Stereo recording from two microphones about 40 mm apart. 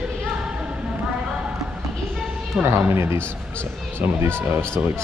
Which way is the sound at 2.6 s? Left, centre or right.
Right.